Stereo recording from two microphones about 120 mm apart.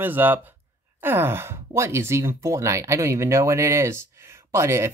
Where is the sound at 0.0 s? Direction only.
15° right (ahead or behind).